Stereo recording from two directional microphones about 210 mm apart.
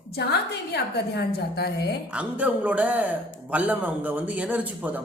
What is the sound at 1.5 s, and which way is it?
Speech, 50° left (ahead or behind).